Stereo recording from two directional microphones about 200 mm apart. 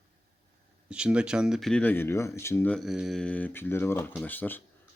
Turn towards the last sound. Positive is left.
turn(degrees=10)  # may be behind; listen again after turning